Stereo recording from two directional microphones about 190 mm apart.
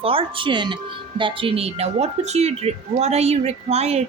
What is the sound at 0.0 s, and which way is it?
Speech, 30° right (ahead or behind).